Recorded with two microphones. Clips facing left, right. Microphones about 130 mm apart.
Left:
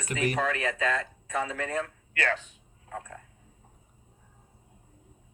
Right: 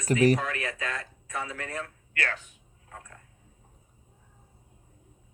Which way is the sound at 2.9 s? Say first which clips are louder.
Left 8 dB; 30° left (ahead or behind).